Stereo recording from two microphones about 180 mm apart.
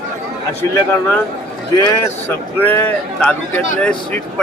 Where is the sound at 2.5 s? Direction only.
10° left (ahead or behind).